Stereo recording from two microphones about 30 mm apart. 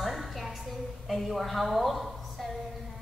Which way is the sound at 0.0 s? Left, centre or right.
Centre.